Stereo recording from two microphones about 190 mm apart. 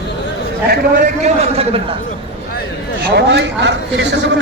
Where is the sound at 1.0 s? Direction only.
35° right (ahead or behind).